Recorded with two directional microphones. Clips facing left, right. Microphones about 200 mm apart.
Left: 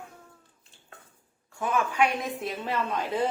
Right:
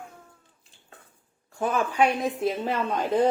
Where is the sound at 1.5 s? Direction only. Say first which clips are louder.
Right 2 dB; 35° right (ahead or behind).